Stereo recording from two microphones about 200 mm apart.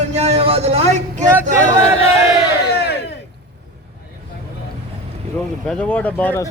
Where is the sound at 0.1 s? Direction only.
30° right (ahead or behind).